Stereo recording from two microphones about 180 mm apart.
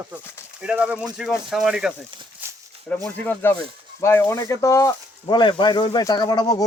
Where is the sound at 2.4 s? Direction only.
10° right (ahead or behind).